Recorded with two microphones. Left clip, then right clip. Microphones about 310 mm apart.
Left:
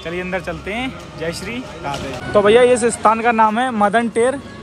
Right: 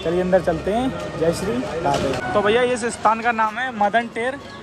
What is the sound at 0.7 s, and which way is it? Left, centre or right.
Speech, centre.